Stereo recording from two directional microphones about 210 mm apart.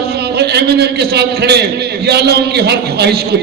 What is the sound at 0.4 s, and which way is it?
A man's voice, 50° right (ahead or behind).